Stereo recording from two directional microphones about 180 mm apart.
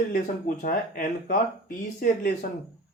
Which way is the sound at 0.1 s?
55° left (ahead or behind).